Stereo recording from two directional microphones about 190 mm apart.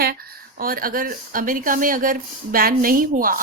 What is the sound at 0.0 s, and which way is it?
Speech, 55° right (ahead or behind).